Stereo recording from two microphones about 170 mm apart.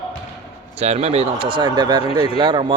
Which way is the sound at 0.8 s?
40° right (ahead or behind).